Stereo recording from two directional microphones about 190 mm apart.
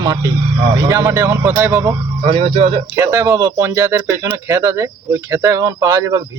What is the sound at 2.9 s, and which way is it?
Speech, 15° right (ahead or behind).